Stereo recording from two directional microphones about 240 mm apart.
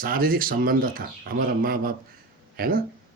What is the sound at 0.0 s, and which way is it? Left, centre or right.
A man's voice, right.